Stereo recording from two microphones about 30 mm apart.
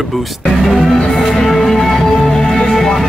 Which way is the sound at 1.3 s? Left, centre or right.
Centre.